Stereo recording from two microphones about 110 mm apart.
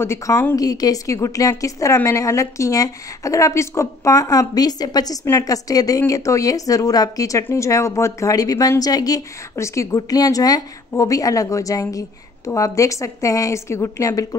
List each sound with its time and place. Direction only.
0.0 s a woman's voice: 25° left (ahead or behind)
0.6 s a woman's voice: 35° left (ahead or behind)